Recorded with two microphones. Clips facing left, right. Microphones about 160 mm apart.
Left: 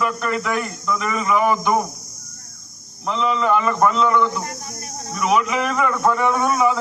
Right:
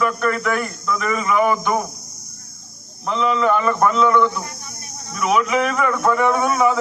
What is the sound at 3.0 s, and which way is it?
A man's voice, centre (ahead or behind).